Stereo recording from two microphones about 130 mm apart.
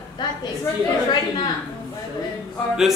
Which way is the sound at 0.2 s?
35° left (ahead or behind).